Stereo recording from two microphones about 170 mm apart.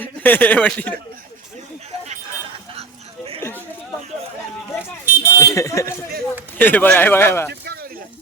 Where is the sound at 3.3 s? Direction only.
15° left (ahead or behind).